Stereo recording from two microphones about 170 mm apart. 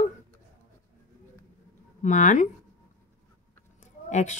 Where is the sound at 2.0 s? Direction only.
45° left (ahead or behind).